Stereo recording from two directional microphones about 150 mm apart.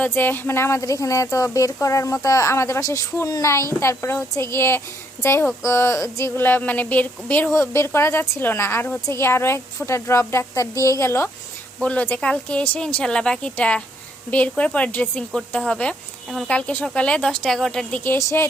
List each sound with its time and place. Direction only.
0.0 s speech: 15° left (ahead or behind)